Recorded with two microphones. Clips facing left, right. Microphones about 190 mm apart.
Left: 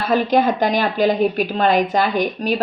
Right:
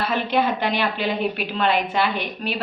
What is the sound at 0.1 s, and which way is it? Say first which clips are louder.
A woman's voice: left 9 dB; 40° left (ahead or behind).